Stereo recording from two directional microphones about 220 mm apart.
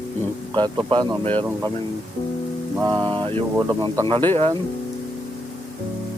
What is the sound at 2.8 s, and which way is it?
Speech, 20° right (ahead or behind).